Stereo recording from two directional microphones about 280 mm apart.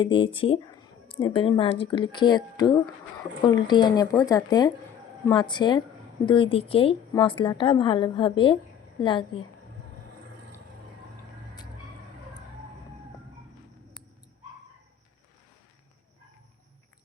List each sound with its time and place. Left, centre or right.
0.0 s a woman's voice: centre